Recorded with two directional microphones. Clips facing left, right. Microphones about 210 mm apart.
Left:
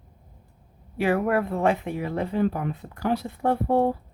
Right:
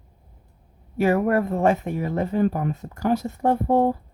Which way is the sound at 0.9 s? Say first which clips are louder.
Right 3 dB; 45° right (ahead or behind).